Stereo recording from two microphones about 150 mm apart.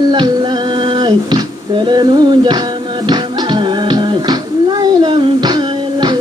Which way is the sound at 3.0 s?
30° right (ahead or behind).